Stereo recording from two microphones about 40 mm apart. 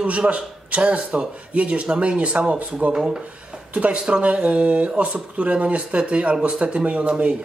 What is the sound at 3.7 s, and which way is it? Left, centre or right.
Speech, right.